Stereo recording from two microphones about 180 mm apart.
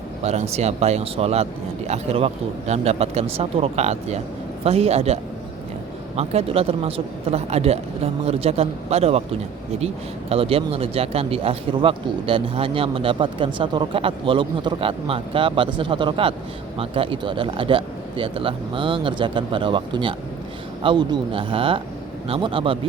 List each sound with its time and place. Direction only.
0.2 s speech: 35° right (ahead or behind)